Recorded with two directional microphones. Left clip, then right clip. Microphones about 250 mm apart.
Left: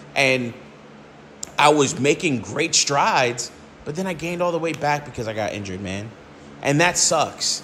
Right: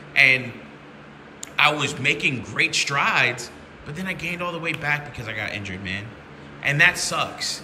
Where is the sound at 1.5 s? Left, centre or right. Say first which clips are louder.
Left 4 dB; centre.